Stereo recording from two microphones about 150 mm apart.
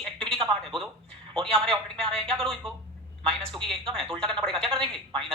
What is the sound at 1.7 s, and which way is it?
A man's voice, 5° left (ahead or behind).